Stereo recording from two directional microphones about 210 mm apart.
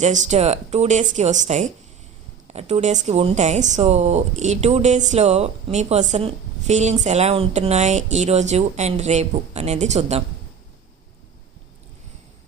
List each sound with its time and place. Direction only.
0.3 s a woman's voice: 30° right (ahead or behind)